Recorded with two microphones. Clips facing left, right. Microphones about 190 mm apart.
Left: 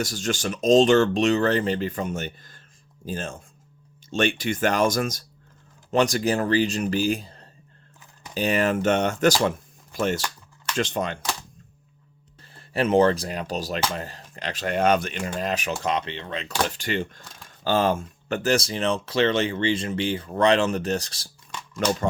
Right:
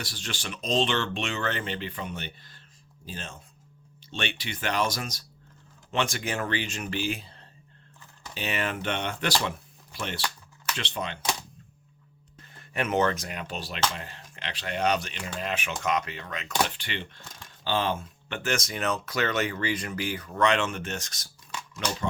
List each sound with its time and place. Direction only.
0.0 s speech: 45° left (ahead or behind)
5.9 s speech: 40° left (ahead or behind)
12.4 s speech: 30° left (ahead or behind)
16.7 s speech: 45° left (ahead or behind)